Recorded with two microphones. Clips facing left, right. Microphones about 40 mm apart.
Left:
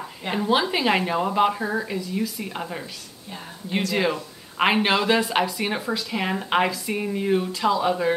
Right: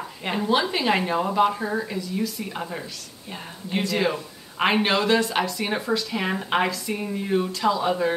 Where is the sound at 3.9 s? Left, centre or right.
Centre.